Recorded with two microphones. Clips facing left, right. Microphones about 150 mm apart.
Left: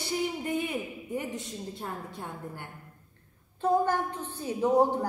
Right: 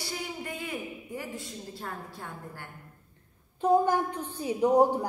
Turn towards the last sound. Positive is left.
turn(degrees=-15)  # may be behind; listen again after turning